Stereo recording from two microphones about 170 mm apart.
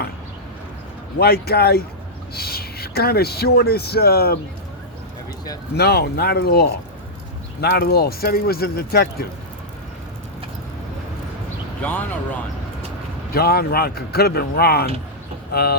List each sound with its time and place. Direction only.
1.2 s speech: 70° left (ahead or behind)
5.7 s speech: 75° left (ahead or behind)
11.8 s speech: 10° left (ahead or behind)
13.3 s speech: 65° left (ahead or behind)